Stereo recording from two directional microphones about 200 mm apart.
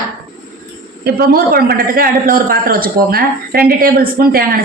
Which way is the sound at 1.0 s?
50° right (ahead or behind).